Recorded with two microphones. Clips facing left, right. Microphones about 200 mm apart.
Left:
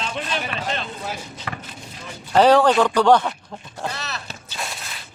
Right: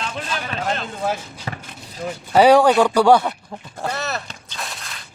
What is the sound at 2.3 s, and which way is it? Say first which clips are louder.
Speech: right 2 dB; 10° right (ahead or behind).